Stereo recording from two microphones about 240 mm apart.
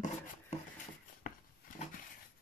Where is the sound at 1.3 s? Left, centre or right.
Left.